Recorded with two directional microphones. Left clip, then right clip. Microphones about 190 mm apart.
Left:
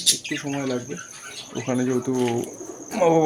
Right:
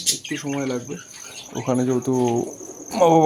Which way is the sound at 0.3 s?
5° right (ahead or behind).